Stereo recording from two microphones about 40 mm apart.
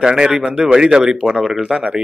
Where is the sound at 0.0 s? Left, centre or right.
Centre.